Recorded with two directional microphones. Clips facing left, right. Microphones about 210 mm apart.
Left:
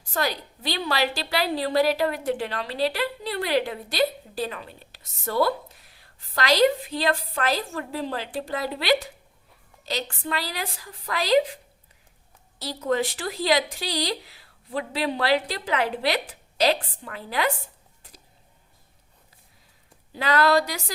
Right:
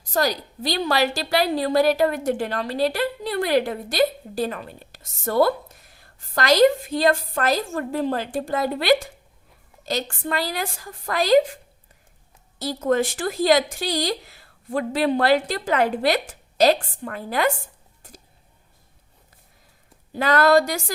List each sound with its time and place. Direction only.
0.1 s a woman's voice: 40° right (ahead or behind)
18.0 s a sound: 45° right (ahead or behind)
20.1 s a woman's voice: 45° right (ahead or behind)